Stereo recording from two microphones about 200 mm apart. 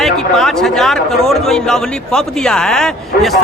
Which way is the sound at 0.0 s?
Centre (ahead or behind).